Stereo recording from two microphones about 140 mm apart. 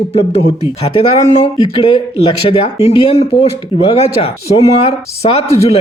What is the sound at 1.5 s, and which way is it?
Speech, 35° left (ahead or behind).